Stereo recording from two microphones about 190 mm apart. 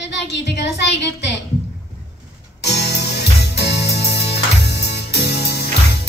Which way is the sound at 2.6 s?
60° left (ahead or behind).